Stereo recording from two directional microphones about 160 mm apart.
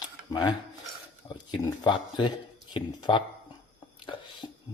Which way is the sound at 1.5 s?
30° left (ahead or behind).